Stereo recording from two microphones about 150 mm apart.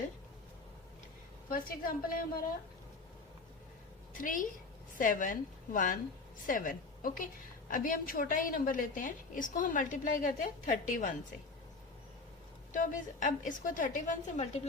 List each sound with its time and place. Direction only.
1.5 s a woman's voice: 70° left (ahead or behind)
4.2 s a woman's voice: 65° left (ahead or behind)
12.7 s a woman's voice: 60° left (ahead or behind)